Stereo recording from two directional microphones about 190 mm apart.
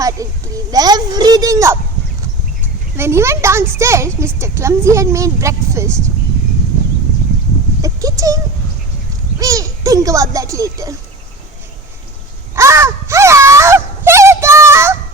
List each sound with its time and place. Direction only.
0.0 s a child's voice: 20° right (ahead or behind)
3.0 s speech: 15° right (ahead or behind)
7.8 s a sound: 20° right (ahead or behind)
9.4 s speech: 15° right (ahead or behind)
12.5 s wail: 15° right (ahead or behind)